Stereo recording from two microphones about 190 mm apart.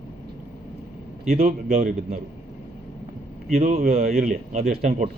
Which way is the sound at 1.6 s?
45° right (ahead or behind).